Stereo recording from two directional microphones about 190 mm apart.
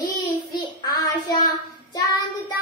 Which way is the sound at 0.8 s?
20° left (ahead or behind).